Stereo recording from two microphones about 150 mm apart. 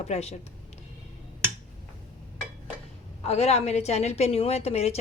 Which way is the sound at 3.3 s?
45° left (ahead or behind).